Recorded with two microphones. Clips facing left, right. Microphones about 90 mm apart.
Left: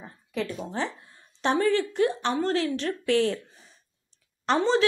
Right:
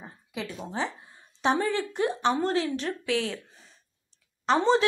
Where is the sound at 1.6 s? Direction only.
15° right (ahead or behind).